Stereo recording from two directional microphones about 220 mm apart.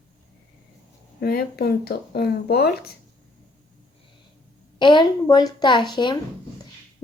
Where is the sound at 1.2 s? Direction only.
45° left (ahead or behind).